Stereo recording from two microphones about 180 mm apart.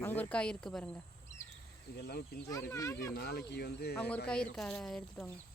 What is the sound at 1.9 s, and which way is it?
Speech, 60° left (ahead or behind).